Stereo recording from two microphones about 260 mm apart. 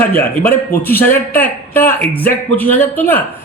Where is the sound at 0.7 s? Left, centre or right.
Centre.